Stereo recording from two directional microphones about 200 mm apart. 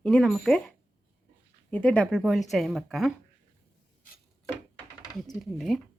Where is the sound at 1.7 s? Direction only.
5° left (ahead or behind).